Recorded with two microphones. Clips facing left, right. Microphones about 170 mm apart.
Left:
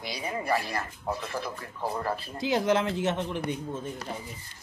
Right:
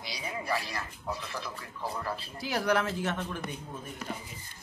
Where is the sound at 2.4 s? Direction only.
20° left (ahead or behind).